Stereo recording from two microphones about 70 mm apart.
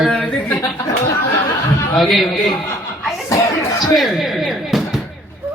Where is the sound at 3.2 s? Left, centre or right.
Left.